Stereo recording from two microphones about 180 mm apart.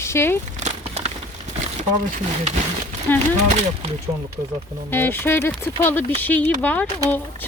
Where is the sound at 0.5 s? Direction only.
40° right (ahead or behind).